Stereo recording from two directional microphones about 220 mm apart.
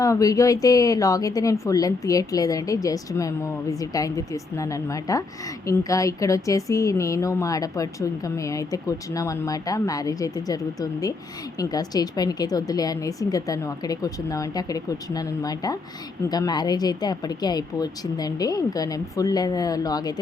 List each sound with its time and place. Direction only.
0.0 s a woman's voice: 15° left (ahead or behind)